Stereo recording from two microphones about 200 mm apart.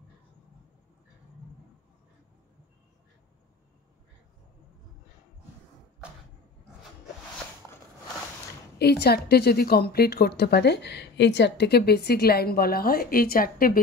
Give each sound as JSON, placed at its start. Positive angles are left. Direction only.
{"t": 8.7, "sound": "a woman's voice", "side_deg": 55}